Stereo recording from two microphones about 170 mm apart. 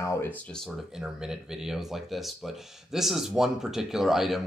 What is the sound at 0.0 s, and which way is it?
Speech, 10° left (ahead or behind).